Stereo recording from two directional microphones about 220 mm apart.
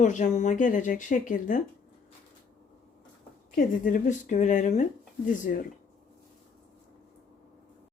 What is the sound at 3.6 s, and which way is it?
A woman's voice, 35° left (ahead or behind).